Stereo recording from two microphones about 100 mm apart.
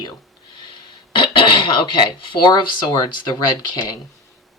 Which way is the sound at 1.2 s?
55° left (ahead or behind).